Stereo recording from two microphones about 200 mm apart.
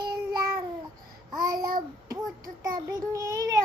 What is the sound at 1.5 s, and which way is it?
Child singing, 45° right (ahead or behind).